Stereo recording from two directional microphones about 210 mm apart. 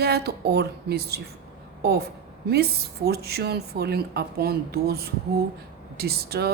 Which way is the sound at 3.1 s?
50° right (ahead or behind).